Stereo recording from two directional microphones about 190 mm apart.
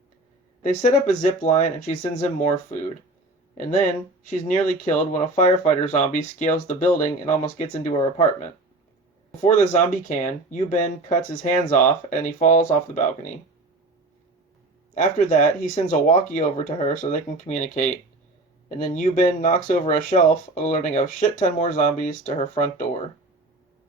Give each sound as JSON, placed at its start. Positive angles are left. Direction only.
{"t": 0.6, "sound": "speech", "side_deg": 40}
{"t": 4.3, "sound": "speech", "side_deg": 40}
{"t": 9.4, "sound": "speech", "side_deg": 40}
{"t": 14.9, "sound": "speech", "side_deg": 45}
{"t": 18.9, "sound": "speech", "side_deg": 40}